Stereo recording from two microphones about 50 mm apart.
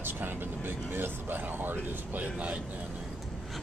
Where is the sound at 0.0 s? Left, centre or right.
Right.